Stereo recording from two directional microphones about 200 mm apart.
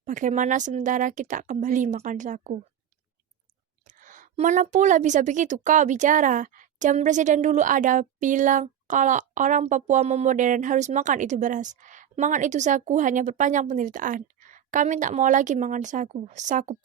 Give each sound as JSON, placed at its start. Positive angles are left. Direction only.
{"t": 0.0, "sound": "a woman's voice", "side_deg": -40}
{"t": 3.8, "sound": "a woman's voice", "side_deg": -40}